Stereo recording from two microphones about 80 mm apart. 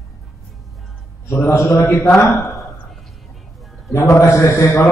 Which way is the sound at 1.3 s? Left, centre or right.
Left.